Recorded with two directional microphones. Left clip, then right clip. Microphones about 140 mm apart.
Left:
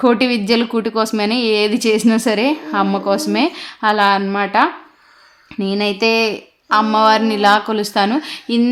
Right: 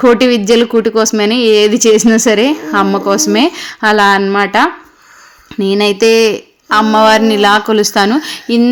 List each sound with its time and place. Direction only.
0.0 s speech: 25° right (ahead or behind)